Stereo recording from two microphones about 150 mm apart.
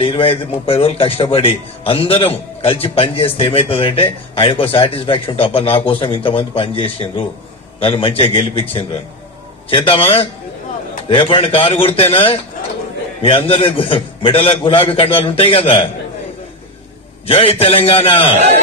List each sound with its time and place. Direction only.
0.0 s a man's voice: 35° left (ahead or behind)
9.6 s a man's voice: 35° left (ahead or behind)
17.2 s a man's voice: 40° left (ahead or behind)